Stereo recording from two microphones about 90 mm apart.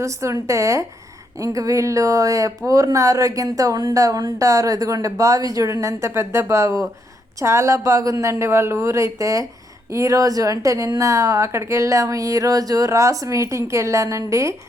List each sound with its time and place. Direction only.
0.0 s a woman's voice: 35° right (ahead or behind)